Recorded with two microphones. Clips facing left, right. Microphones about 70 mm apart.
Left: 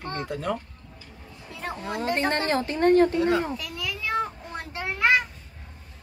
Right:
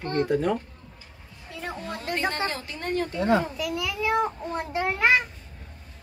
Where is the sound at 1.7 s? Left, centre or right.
Left.